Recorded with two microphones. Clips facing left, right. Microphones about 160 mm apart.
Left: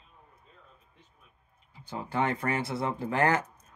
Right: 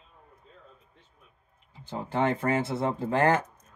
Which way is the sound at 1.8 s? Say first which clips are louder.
Right 3 dB; 25° right (ahead or behind).